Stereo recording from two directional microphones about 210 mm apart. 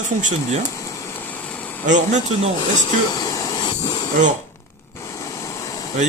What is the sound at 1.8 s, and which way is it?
Speech, 35° right (ahead or behind).